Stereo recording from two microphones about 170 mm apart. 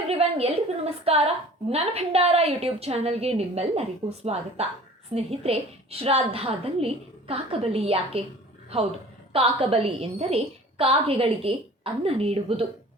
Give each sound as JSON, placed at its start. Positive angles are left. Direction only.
{"t": 0.1, "sound": "a woman's voice", "side_deg": -35}
{"t": 9.3, "sound": "a woman's voice", "side_deg": -35}